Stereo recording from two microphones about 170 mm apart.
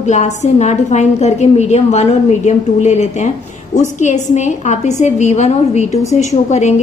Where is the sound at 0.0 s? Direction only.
45° left (ahead or behind).